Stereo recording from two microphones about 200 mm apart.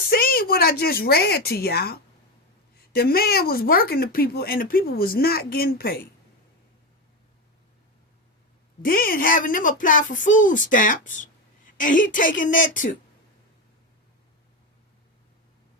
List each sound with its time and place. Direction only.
0.1 s speech: 50° left (ahead or behind)
8.8 s speech: 45° left (ahead or behind)